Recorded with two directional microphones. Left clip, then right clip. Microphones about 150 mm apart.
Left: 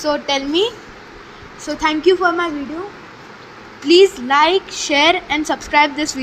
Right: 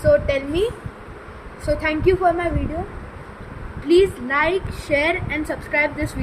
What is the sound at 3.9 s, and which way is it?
A woman's voice, 50° left (ahead or behind).